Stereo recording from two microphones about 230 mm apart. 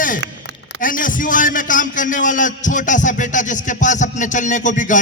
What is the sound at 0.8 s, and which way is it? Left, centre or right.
A man's voice, left.